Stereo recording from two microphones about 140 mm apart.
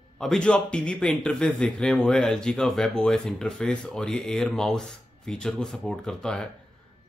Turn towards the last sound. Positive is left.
turn(degrees=5)  # may be behind; listen again after turning